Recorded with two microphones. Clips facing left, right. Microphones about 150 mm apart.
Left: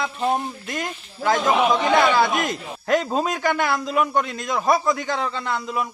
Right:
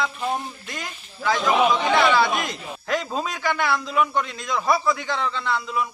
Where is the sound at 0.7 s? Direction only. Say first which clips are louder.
Left 6 dB; 45° left (ahead or behind).